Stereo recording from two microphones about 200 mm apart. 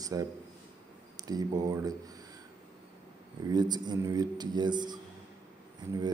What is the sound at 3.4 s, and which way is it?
Speech, 20° right (ahead or behind).